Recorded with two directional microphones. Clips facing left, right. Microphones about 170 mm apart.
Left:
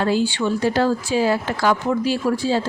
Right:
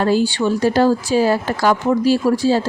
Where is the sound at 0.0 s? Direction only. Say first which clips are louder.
Right 3 dB; 40° right (ahead or behind).